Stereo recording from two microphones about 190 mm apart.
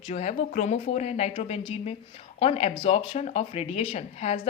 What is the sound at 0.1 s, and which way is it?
Speech, 35° left (ahead or behind).